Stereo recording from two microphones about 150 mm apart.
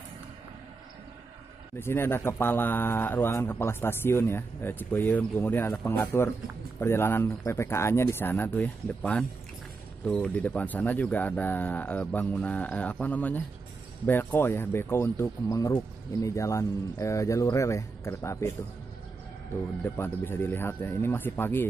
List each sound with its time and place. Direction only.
1.8 s speech: 15° left (ahead or behind)
19.8 s speech: 15° left (ahead or behind)